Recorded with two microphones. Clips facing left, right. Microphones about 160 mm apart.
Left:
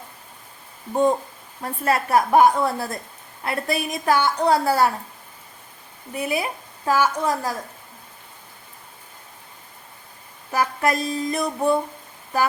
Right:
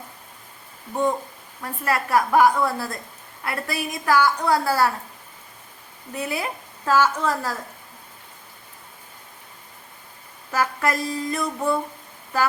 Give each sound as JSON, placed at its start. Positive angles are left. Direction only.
{"t": 1.6, "sound": "a woman's voice", "side_deg": 25}
{"t": 6.1, "sound": "a woman's voice", "side_deg": 15}
{"t": 10.5, "sound": "a woman's voice", "side_deg": 20}